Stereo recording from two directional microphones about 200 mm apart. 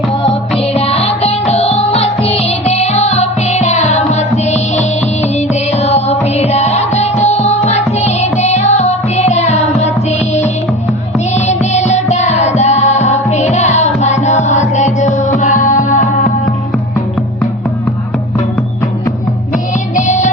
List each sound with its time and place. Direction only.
0.1 s music: 30° left (ahead or behind)
20.0 s music: 40° left (ahead or behind)